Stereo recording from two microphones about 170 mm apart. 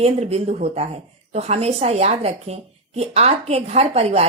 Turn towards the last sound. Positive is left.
turn(degrees=-35)  # may be behind; listen again after turning